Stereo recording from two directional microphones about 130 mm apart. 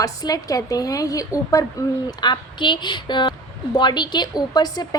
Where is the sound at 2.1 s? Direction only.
35° left (ahead or behind).